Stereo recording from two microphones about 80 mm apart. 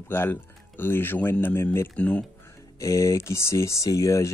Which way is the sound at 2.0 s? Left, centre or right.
Centre.